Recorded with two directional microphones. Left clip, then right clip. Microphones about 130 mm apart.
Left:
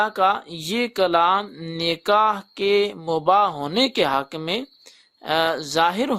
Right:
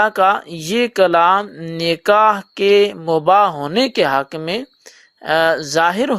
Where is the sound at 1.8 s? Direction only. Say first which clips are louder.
Right 6 dB; 30° right (ahead or behind).